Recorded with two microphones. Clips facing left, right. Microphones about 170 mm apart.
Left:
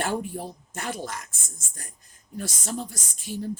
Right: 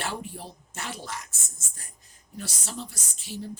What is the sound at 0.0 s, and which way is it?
Speech, 50° left (ahead or behind).